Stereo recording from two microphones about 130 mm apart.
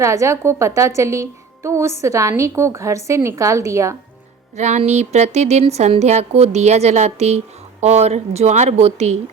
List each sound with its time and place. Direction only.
0.0 s a woman's voice: 25° right (ahead or behind)
4.5 s speech: 60° right (ahead or behind)